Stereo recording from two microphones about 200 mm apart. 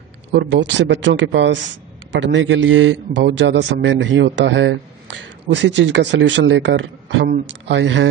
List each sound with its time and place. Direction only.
0.5 s a man's voice: 65° right (ahead or behind)